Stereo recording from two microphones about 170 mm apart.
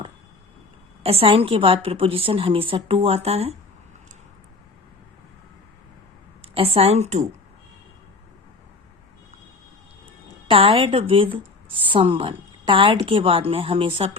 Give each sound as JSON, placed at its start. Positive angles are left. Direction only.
{"t": 1.0, "sound": "a woman's voice", "side_deg": -35}
{"t": 6.4, "sound": "speech", "side_deg": -35}
{"t": 10.5, "sound": "a woman's voice", "side_deg": -35}